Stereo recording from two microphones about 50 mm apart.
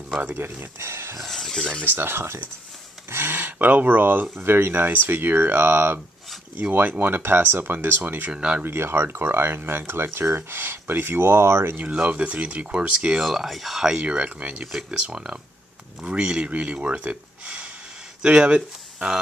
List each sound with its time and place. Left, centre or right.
0.4 s speech: right
1.2 s speech: centre
1.9 s speech: right
3.5 s speech: right
6.5 s speech: right
7.2 s speech: right
8.3 s speech: right
8.6 s speech: right
11.7 s speech: right
13.2 s speech: centre
13.8 s speech: centre
14.7 s speech: centre